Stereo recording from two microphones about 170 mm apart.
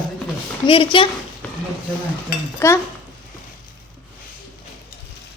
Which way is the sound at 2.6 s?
15° left (ahead or behind).